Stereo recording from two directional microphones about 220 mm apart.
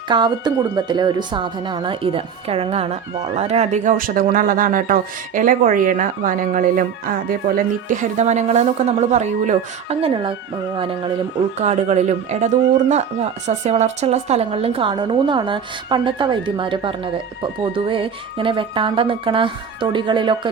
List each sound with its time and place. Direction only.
0.1 s a woman's voice: 20° right (ahead or behind)
13.7 s a woman's voice: 30° right (ahead or behind)